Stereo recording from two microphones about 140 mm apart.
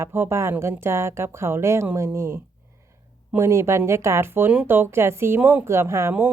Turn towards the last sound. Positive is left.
turn(degrees=-15)  # may be behind; listen again after turning